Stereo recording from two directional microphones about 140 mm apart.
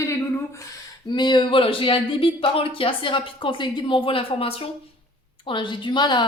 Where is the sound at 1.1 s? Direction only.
35° left (ahead or behind).